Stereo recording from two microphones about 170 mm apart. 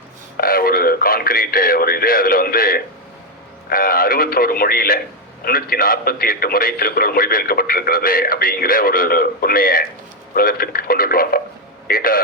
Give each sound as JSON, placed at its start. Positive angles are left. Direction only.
{"t": 0.3, "sound": "a man's voice", "side_deg": 60}